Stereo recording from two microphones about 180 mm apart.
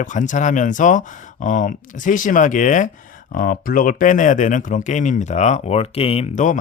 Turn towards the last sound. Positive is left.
turn(degrees=45)  # may be behind; listen again after turning